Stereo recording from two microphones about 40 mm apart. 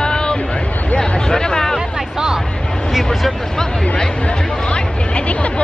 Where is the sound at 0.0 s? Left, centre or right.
Left.